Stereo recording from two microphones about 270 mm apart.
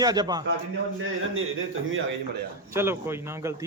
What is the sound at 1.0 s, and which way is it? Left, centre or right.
Speech, right.